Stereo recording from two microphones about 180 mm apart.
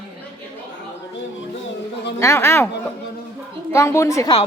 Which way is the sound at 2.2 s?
15° left (ahead or behind).